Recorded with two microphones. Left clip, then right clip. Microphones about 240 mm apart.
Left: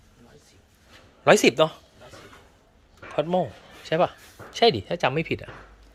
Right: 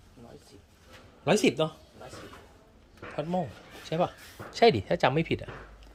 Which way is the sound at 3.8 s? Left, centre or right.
Centre.